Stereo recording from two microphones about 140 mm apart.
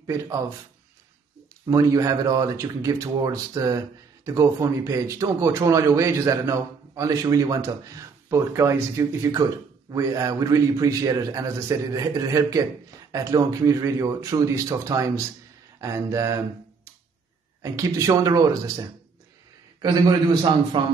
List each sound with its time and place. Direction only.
0.0 s a man's voice: 20° right (ahead or behind)
1.7 s a man's voice: 25° right (ahead or behind)
17.6 s a man's voice: 25° right (ahead or behind)
20.7 s speech: 35° right (ahead or behind)